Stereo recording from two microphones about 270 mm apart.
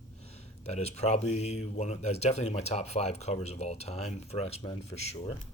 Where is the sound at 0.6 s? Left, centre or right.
Left.